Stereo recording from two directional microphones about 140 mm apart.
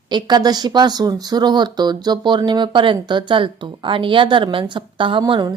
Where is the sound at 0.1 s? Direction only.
30° right (ahead or behind).